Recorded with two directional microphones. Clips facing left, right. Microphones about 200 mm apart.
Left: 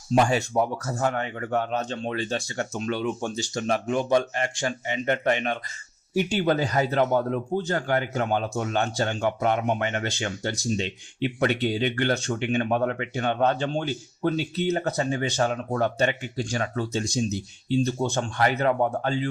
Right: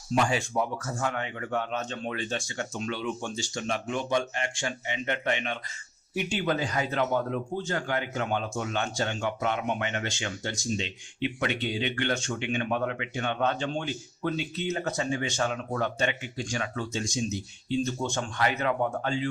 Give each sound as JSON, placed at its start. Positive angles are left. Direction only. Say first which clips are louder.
{"t": 0.2, "sound": "a man's voice", "louder": "left 5 dB", "side_deg": 40}